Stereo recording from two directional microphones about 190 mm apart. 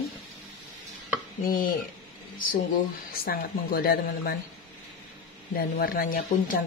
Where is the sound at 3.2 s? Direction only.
50° left (ahead or behind).